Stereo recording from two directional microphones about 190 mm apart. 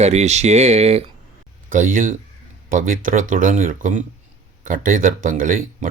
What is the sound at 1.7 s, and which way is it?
Speech, 45° right (ahead or behind).